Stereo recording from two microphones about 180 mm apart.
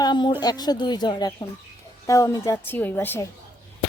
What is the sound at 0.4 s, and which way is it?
A woman's voice, 20° left (ahead or behind).